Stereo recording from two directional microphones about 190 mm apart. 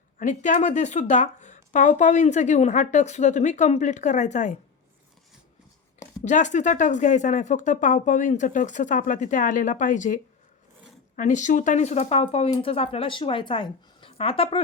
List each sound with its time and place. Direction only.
0.2 s speech: 40° left (ahead or behind)
6.2 s speech: 40° left (ahead or behind)
11.2 s speech: 40° left (ahead or behind)